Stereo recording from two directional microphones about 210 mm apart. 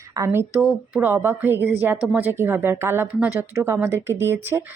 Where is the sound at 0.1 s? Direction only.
15° right (ahead or behind).